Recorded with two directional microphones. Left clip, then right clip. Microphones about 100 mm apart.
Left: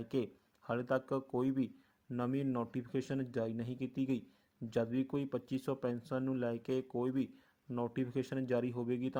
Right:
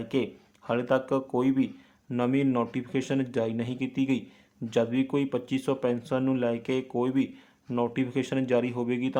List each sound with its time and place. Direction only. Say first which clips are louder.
0.0 s speech: right 9 dB; 40° left (ahead or behind)